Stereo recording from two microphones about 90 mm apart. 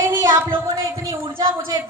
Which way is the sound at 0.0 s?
40° right (ahead or behind).